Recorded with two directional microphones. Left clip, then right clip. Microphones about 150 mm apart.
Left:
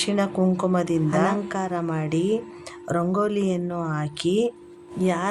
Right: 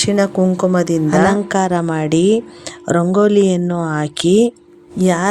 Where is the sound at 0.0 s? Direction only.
40° right (ahead or behind).